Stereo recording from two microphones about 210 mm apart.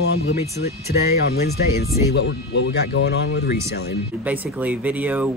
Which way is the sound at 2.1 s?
60° left (ahead or behind).